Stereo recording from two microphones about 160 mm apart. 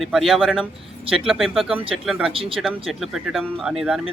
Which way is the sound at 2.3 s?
35° right (ahead or behind).